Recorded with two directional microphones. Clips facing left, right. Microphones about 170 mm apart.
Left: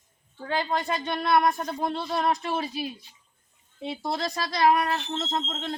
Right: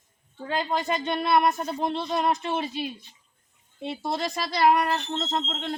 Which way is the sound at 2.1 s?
20° right (ahead or behind).